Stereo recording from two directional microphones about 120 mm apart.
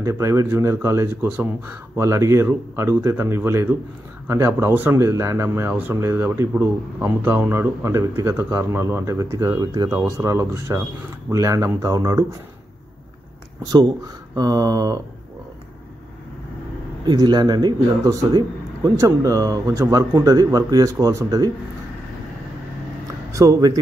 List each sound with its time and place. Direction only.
0.0 s speech: 25° right (ahead or behind)
13.7 s speech: 35° right (ahead or behind)
17.0 s speech: 35° right (ahead or behind)
23.3 s speech: 25° right (ahead or behind)